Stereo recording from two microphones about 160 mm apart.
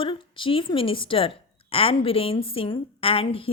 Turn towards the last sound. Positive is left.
turn(degrees=35)  # may be behind; listen again after turning